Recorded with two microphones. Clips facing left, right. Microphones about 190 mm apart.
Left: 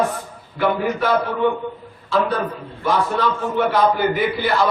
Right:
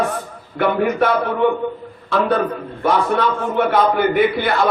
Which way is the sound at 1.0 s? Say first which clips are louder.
Right 2 dB; 60° right (ahead or behind).